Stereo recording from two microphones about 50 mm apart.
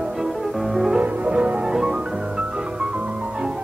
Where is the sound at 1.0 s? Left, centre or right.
Right.